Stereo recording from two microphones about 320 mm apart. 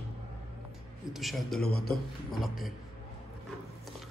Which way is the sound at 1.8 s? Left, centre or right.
Left.